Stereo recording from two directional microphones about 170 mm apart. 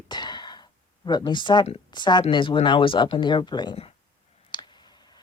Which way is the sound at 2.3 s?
30° left (ahead or behind).